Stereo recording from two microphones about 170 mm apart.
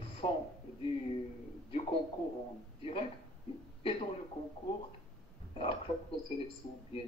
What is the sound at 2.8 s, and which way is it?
Speech, 30° left (ahead or behind).